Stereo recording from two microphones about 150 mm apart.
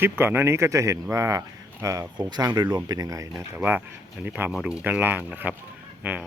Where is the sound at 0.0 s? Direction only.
15° right (ahead or behind).